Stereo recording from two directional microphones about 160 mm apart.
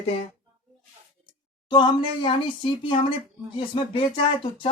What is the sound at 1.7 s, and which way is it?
Speech, 25° left (ahead or behind).